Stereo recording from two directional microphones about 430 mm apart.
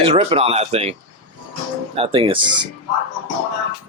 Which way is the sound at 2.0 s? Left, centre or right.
Centre.